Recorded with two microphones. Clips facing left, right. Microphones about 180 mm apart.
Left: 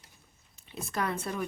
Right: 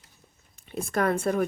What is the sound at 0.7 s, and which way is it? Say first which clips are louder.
Speech: right 8 dB; 50° right (ahead or behind).